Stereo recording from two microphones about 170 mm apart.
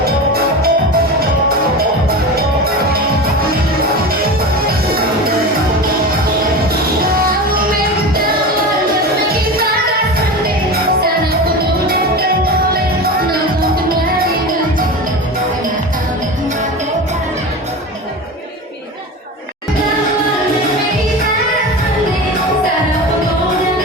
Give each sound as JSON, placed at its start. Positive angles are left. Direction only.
{"t": 0.0, "sound": "music", "side_deg": -65}
{"t": 7.0, "sound": "music", "side_deg": -60}
{"t": 11.9, "sound": "music", "side_deg": -65}
{"t": 13.6, "sound": "music", "side_deg": -60}